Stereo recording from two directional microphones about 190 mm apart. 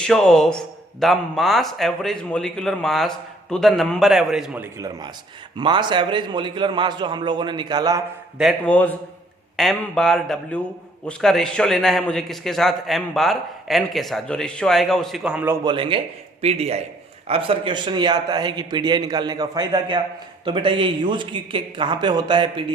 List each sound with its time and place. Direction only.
0.0 s a man's voice: 5° left (ahead or behind); by 8.0 s 20° right (ahead or behind)
8.4 s a man's voice: centre (ahead or behind)
15.6 s a man's voice: 25° right (ahead or behind)